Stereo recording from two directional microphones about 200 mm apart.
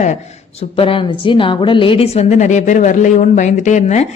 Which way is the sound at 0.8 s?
25° left (ahead or behind).